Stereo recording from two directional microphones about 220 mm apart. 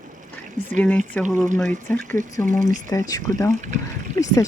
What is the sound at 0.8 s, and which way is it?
Speech, 10° left (ahead or behind).